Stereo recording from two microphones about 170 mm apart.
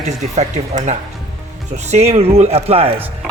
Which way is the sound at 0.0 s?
40° right (ahead or behind).